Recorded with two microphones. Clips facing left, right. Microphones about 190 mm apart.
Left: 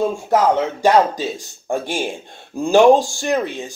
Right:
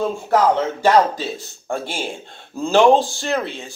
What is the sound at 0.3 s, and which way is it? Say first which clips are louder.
Speech: even; 15° left (ahead or behind).